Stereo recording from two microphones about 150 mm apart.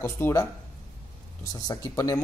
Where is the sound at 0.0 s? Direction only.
20° left (ahead or behind).